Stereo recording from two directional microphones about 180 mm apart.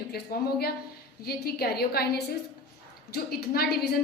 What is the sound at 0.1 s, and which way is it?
A woman's voice, 60° left (ahead or behind).